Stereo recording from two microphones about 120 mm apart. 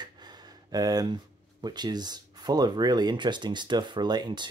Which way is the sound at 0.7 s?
30° right (ahead or behind).